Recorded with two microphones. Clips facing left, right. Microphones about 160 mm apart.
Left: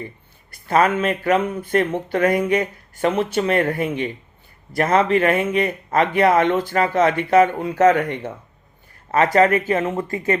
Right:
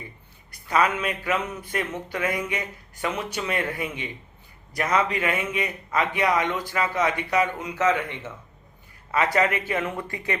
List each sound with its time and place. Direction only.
0.7 s a man's voice: 50° left (ahead or behind)
9.8 s speech: 25° left (ahead or behind)